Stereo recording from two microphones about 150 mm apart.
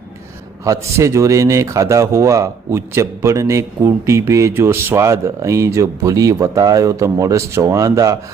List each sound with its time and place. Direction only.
0.6 s a man's voice: 20° right (ahead or behind)